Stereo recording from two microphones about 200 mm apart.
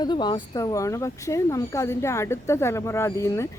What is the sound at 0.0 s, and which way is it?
Speech, 20° left (ahead or behind).